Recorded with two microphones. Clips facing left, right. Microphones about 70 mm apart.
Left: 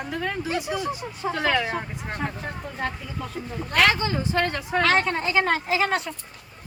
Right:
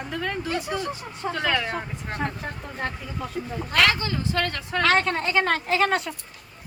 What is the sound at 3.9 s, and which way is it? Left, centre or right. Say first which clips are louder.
Speech: left 2 dB; left.